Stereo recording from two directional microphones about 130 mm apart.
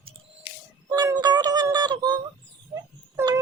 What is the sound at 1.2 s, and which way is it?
Music, 30° right (ahead or behind).